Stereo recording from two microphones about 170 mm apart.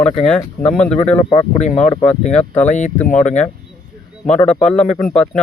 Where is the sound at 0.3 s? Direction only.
10° left (ahead or behind).